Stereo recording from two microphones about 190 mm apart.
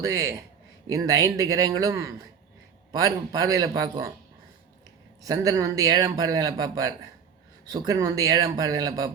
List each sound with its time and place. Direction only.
0.0 s a man's voice: 20° right (ahead or behind)
5.2 s speech: 20° right (ahead or behind)